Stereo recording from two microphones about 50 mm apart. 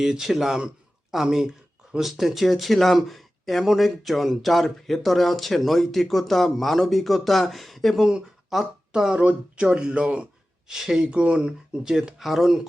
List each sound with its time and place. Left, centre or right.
0.0 s speech: centre
10.7 s speech: centre
11.1 s speech: centre